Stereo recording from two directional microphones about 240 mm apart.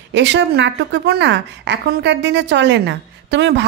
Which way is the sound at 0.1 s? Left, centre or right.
Right.